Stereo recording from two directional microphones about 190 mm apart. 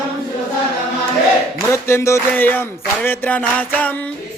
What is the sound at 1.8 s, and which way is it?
Music, 15° left (ahead or behind).